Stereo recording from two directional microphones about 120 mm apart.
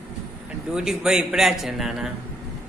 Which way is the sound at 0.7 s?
5° right (ahead or behind).